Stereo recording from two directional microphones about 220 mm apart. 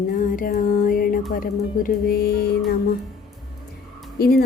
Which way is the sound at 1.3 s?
40° left (ahead or behind).